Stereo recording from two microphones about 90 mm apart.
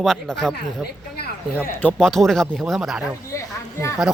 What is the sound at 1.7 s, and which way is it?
Speech, 20° left (ahead or behind).